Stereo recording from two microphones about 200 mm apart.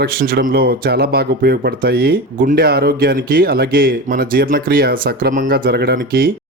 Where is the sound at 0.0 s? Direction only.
50° right (ahead or behind).